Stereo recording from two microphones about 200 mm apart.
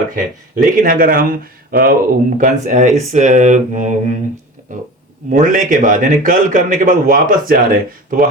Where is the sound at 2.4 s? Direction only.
35° right (ahead or behind).